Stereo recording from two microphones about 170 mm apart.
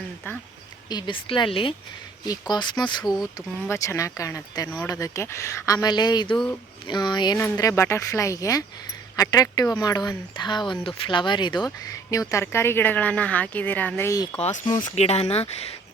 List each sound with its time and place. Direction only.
0.9 s speech: 25° left (ahead or behind)
7.3 s speech: 15° left (ahead or behind)
14.4 s speech: 40° left (ahead or behind)